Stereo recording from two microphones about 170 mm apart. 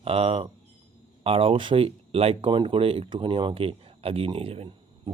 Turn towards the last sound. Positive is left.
turn(degrees=-35)  # may be behind; listen again after turning